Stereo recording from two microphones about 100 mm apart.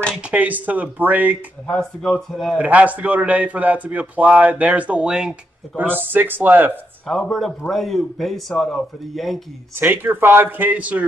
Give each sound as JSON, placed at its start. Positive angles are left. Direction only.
{"t": 0.3, "sound": "a man's voice", "side_deg": -15}
{"t": 1.7, "sound": "speech", "side_deg": 5}
{"t": 2.6, "sound": "a man's voice", "side_deg": -15}
{"t": 5.8, "sound": "a man's voice", "side_deg": -20}
{"t": 7.1, "sound": "speech", "side_deg": 0}
{"t": 9.8, "sound": "a man's voice", "side_deg": -20}